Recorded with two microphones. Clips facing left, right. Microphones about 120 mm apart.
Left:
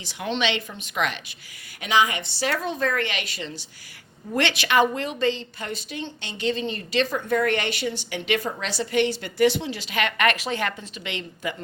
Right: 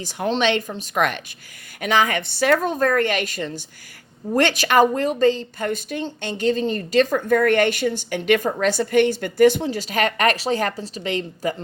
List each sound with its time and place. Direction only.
0.0 s a woman's voice: 45° right (ahead or behind)